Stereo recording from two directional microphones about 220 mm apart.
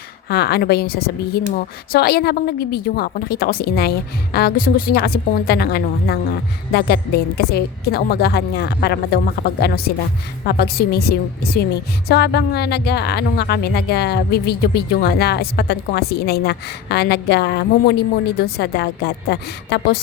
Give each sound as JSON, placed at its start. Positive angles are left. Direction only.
{"t": 0.3, "sound": "a woman's voice", "side_deg": 45}